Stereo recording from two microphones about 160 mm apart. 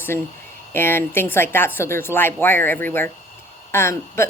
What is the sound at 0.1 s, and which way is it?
A woman's voice, 15° left (ahead or behind).